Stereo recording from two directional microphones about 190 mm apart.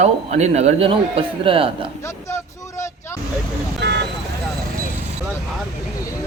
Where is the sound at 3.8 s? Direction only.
65° right (ahead or behind).